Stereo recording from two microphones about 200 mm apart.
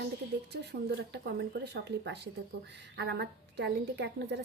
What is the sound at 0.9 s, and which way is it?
A woman's voice, 55° right (ahead or behind).